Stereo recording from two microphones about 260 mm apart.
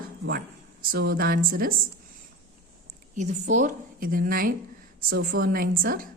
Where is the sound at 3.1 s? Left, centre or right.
Right.